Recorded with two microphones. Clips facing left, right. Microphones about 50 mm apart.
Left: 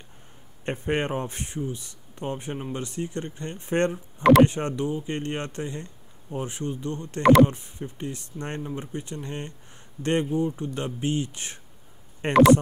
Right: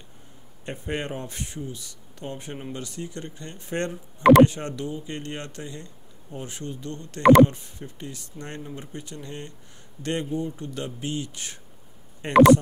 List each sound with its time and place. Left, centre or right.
0.7 s speech: left
4.2 s speech: centre
4.5 s speech: left